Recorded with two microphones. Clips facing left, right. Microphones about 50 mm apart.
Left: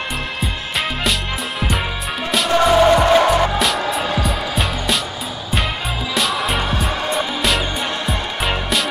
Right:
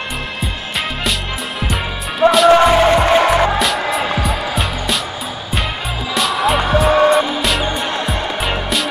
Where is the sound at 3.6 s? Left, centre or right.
Centre.